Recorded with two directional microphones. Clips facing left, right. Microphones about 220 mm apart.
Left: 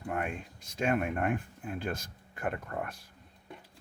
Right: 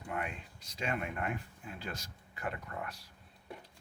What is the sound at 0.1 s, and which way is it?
Speech, 50° left (ahead or behind).